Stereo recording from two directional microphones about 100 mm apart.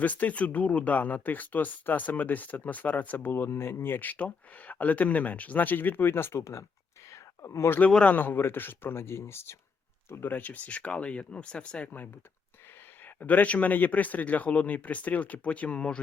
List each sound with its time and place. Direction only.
0.0 s speech: 15° left (ahead or behind)
7.1 s a sound: 30° left (ahead or behind)
7.8 s speech: 10° left (ahead or behind)
13.1 s speech: 15° left (ahead or behind)